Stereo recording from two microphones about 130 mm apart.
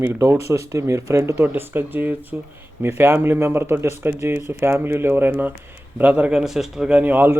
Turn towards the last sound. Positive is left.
turn(degrees=-15)  # may be behind; listen again after turning